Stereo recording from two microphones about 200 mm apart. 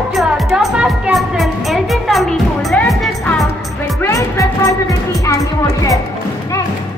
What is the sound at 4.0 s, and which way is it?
Music, 15° left (ahead or behind).